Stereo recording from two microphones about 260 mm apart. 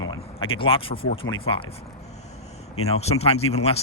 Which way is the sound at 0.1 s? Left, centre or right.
Centre.